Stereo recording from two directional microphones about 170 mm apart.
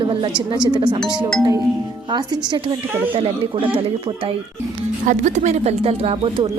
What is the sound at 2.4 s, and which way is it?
A woman's voice, 25° right (ahead or behind).